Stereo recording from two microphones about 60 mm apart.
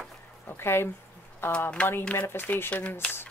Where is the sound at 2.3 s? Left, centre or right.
Left.